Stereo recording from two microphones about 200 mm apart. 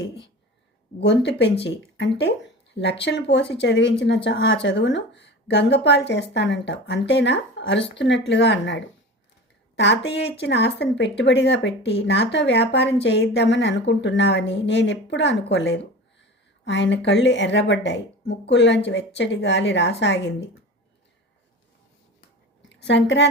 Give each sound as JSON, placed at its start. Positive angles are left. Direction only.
{"t": 0.9, "sound": "a woman's voice", "side_deg": 55}
{"t": 22.7, "sound": "a woman's voice", "side_deg": 60}